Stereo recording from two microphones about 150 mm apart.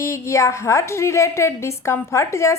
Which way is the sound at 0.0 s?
20° left (ahead or behind).